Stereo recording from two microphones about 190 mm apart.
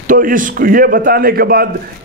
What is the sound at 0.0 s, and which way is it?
A man's voice, 45° right (ahead or behind).